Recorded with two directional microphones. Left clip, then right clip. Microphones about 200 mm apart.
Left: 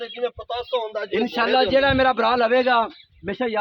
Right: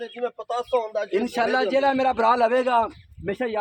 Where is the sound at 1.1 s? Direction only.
35° left (ahead or behind).